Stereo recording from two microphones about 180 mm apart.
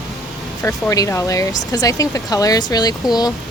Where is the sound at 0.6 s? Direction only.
20° left (ahead or behind).